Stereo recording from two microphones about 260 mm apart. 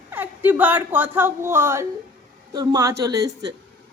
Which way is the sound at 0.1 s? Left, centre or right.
Centre.